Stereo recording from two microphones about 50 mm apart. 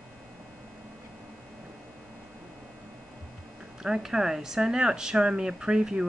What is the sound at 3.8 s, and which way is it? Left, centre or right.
Speech, centre.